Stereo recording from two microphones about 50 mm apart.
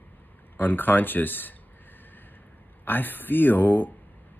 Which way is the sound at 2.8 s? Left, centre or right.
Left.